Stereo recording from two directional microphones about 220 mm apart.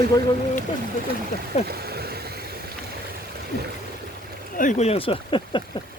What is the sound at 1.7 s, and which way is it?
Vehicle, 45° right (ahead or behind).